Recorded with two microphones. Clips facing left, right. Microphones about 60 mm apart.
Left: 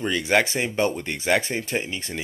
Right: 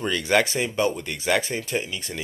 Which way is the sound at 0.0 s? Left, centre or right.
Left.